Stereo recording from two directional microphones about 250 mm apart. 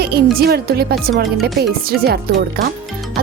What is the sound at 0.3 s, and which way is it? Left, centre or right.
A woman's voice, right.